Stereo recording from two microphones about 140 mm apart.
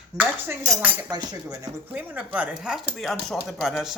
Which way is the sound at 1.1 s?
30° right (ahead or behind).